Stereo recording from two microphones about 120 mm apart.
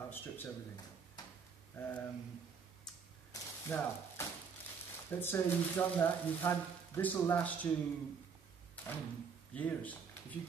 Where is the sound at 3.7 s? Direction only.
20° left (ahead or behind).